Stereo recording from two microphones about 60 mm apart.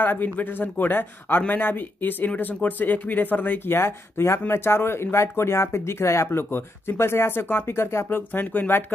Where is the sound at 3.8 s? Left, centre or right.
Left.